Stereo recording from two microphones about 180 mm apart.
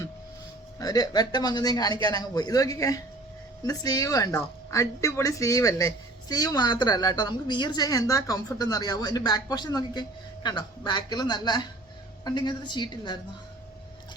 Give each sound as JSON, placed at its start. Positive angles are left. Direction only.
{"t": 0.8, "sound": "speech", "side_deg": 20}